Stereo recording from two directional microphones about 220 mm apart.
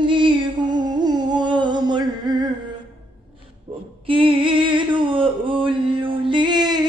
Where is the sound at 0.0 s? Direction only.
20° right (ahead or behind).